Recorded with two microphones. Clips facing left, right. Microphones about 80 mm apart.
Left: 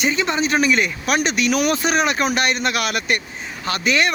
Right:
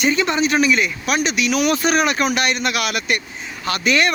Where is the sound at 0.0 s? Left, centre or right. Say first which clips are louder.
Right 2 dB; left.